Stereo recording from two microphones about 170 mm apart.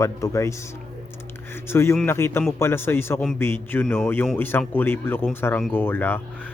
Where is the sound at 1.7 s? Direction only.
15° left (ahead or behind).